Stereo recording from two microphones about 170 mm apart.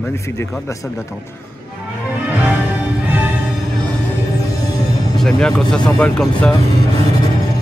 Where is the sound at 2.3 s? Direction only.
10° right (ahead or behind).